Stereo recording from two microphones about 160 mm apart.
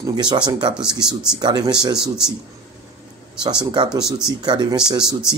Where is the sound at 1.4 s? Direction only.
25° right (ahead or behind).